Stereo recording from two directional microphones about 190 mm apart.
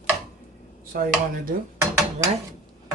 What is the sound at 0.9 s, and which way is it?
Speech, 50° right (ahead or behind).